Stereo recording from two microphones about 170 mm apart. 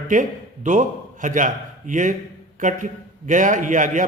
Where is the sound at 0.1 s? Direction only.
50° right (ahead or behind).